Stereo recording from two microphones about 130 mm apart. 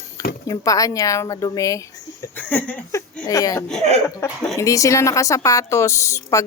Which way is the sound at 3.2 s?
25° left (ahead or behind).